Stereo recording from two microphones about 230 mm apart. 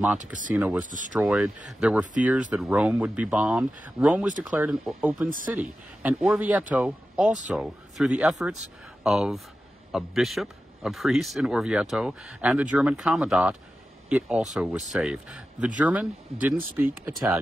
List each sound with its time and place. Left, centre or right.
0.6 s a man's voice: centre